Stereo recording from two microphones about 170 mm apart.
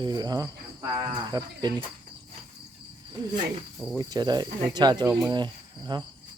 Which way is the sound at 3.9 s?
25° right (ahead or behind).